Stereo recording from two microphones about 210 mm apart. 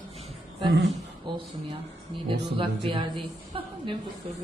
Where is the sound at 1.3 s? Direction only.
25° right (ahead or behind).